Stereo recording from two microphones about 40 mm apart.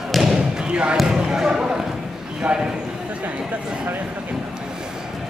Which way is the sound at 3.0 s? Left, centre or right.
Right.